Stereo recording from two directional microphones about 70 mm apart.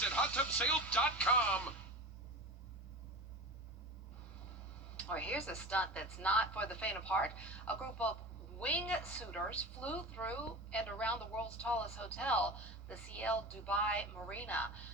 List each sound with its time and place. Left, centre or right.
0.0 s a woman's voice: centre
4.9 s a woman's voice: left